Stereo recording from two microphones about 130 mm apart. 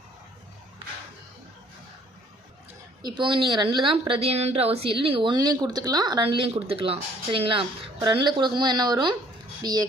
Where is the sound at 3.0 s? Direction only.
40° right (ahead or behind).